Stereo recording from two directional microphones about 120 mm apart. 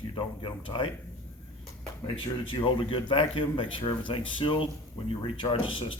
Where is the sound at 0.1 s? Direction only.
45° left (ahead or behind).